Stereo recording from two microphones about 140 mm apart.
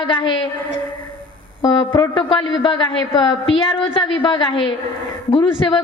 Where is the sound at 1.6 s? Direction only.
30° left (ahead or behind).